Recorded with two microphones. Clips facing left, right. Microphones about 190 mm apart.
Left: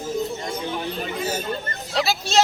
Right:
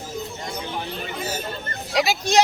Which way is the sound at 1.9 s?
15° right (ahead or behind).